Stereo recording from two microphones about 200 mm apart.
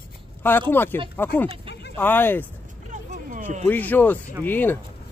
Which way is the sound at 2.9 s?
40° right (ahead or behind).